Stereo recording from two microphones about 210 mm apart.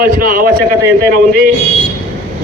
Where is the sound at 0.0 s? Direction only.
40° right (ahead or behind).